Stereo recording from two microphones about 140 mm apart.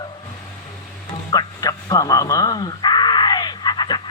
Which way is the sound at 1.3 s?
30° left (ahead or behind).